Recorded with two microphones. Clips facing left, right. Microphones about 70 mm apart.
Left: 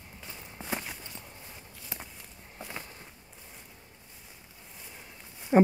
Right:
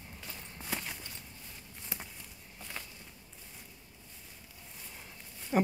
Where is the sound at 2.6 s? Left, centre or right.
Left.